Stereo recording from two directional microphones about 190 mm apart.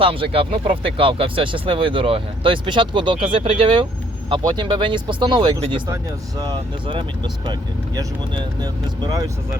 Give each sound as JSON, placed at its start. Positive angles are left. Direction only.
{"t": 0.0, "sound": "speech", "side_deg": -30}